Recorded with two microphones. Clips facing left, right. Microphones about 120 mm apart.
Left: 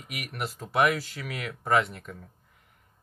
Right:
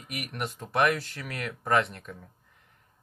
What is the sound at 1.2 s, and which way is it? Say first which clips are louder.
Speech: even; 5° left (ahead or behind).